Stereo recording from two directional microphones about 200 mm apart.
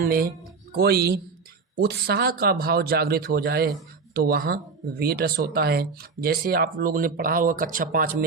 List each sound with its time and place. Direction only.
0.0 s speech: 45° right (ahead or behind)